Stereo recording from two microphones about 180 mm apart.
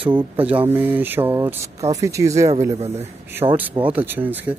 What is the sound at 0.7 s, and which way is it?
Speech, 10° right (ahead or behind).